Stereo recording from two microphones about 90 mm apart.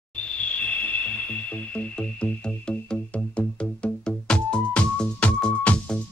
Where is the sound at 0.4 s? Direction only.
15° left (ahead or behind).